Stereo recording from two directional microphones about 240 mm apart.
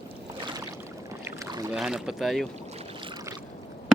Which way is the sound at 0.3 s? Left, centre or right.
Centre.